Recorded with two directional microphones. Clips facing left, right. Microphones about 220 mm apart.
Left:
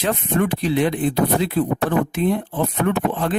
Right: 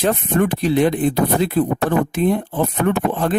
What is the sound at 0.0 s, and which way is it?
Speech, 40° right (ahead or behind).